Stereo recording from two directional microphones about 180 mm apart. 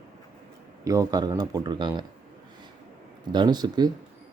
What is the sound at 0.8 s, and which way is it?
Speech, 20° right (ahead or behind).